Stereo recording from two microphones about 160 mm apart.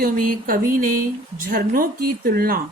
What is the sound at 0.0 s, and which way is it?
Speech, 60° right (ahead or behind).